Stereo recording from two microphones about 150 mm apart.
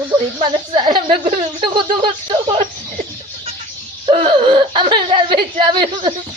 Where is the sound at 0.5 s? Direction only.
30° right (ahead or behind).